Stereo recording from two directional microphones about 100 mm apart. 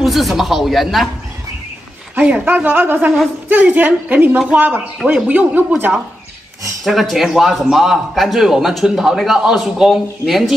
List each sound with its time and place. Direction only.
0.0 s a man's voice: centre (ahead or behind)
2.1 s speech: 15° right (ahead or behind)
6.8 s a man's voice: centre (ahead or behind)